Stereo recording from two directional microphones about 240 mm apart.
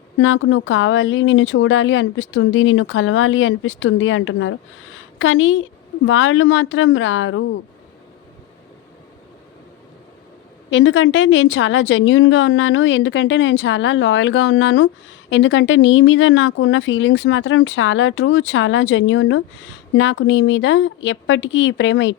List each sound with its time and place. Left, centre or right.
0.2 s speech: left
10.7 s a woman's voice: left